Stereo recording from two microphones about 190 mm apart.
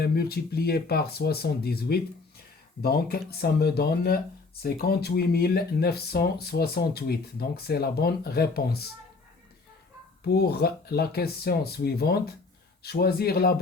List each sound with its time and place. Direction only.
0.0 s speech: 55° left (ahead or behind)
10.2 s speech: 55° left (ahead or behind)